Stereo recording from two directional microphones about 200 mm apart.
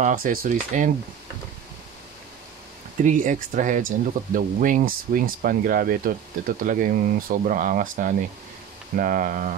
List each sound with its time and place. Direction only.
0.0 s speech: 45° right (ahead or behind)
3.0 s speech: 40° right (ahead or behind)